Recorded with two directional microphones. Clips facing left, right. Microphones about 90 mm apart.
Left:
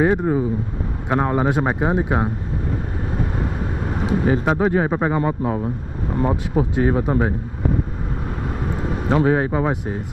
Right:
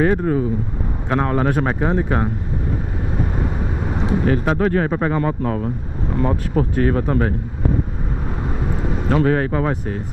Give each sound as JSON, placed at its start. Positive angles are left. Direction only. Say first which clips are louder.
{"t": 0.0, "sound": "speech", "louder": "even", "side_deg": 20}
{"t": 4.2, "sound": "speech", "louder": "even", "side_deg": 15}
{"t": 9.1, "sound": "speech", "louder": "even", "side_deg": 20}